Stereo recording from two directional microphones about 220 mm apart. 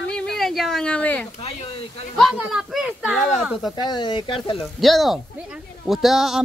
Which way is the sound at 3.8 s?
20° left (ahead or behind).